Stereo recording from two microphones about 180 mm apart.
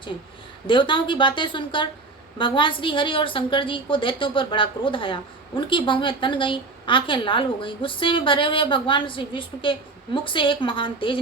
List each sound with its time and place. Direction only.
0.7 s a woman's voice: 25° left (ahead or behind)